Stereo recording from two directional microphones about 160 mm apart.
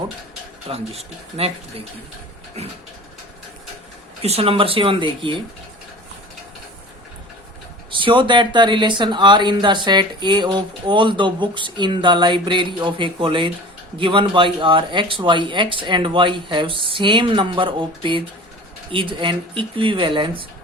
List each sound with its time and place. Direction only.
0.7 s speech: 40° right (ahead or behind)
4.2 s speech: 40° right (ahead or behind)
7.9 s speech: 30° right (ahead or behind)